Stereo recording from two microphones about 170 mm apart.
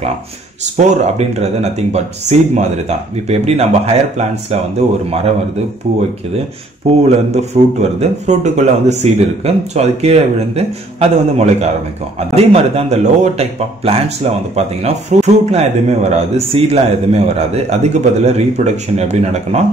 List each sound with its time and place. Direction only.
0.7 s speech: 40° right (ahead or behind)
5.9 s speech: 40° right (ahead or behind)